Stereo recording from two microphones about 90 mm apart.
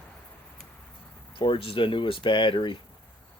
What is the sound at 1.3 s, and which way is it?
Speech, 75° left (ahead or behind).